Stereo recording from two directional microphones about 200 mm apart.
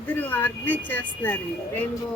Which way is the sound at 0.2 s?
10° left (ahead or behind).